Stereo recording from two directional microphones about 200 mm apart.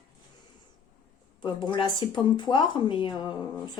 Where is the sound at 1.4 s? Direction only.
25° left (ahead or behind).